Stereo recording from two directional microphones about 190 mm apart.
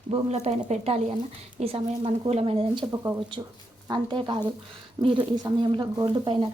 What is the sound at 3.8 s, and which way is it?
Speech, 25° right (ahead or behind).